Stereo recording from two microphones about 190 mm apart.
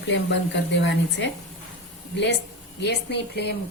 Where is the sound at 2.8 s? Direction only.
60° left (ahead or behind).